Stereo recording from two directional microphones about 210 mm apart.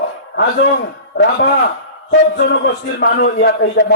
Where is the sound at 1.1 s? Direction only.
50° left (ahead or behind).